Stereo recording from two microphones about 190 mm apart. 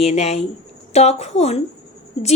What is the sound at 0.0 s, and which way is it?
A woman's voice, 35° left (ahead or behind).